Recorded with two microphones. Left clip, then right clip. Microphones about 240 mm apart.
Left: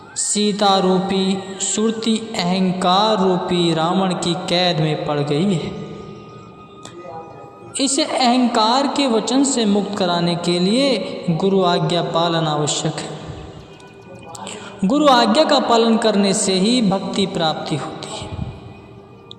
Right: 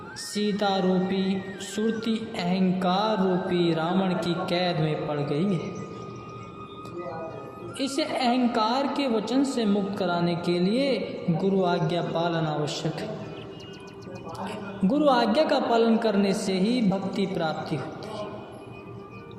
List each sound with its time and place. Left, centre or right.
0.3 s a woman's voice: left
7.8 s a woman's voice: left
14.8 s a woman's voice: left
17.7 s music: left